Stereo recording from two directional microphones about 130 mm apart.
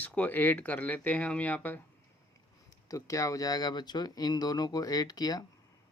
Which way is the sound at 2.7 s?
25° left (ahead or behind).